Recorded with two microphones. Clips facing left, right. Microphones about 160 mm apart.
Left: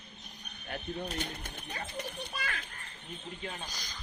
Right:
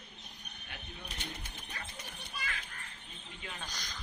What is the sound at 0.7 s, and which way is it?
Speech, 50° left (ahead or behind).